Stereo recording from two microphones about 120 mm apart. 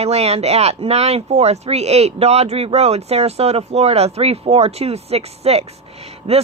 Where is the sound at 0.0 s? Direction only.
60° right (ahead or behind).